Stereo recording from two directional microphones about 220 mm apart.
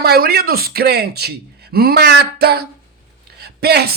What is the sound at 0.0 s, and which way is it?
Speech, 45° right (ahead or behind).